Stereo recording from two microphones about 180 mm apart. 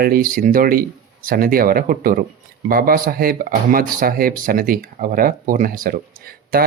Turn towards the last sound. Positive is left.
turn(degrees=-55)  # may be behind; listen again after turning